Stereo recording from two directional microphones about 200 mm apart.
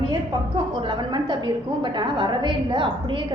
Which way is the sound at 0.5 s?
25° right (ahead or behind).